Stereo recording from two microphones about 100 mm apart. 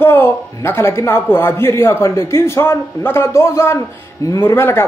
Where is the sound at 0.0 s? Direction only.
20° left (ahead or behind).